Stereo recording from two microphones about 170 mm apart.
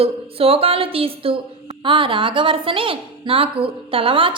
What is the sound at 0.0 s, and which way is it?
A woman's voice, 35° right (ahead or behind).